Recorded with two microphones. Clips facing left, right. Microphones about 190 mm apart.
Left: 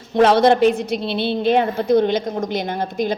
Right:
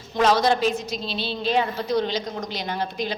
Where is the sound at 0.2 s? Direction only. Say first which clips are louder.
Left 7 dB; 60° left (ahead or behind).